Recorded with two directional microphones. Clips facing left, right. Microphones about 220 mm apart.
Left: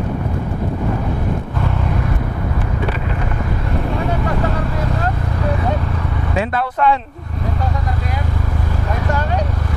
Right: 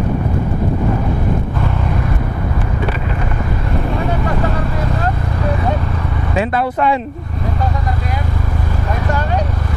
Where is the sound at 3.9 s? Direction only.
20° right (ahead or behind).